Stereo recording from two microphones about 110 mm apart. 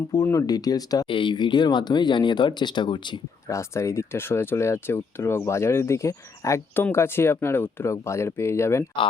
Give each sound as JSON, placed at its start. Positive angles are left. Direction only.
{"t": 0.1, "sound": "speech", "side_deg": 30}
{"t": 1.0, "sound": "speech", "side_deg": 50}
{"t": 3.4, "sound": "speech", "side_deg": 25}